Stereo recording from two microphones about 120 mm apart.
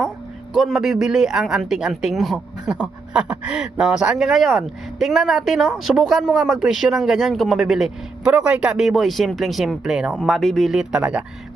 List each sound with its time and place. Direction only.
0.5 s speech: centre (ahead or behind)